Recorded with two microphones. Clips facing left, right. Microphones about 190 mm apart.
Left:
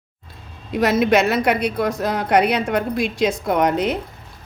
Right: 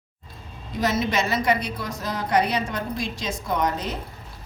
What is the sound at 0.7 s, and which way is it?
A woman's voice, 60° left (ahead or behind).